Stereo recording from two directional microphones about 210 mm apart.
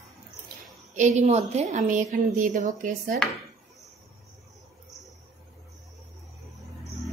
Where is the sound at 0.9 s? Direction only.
35° right (ahead or behind).